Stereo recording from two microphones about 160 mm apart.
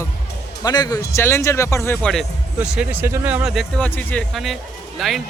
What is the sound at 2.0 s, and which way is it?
A man's voice, centre (ahead or behind).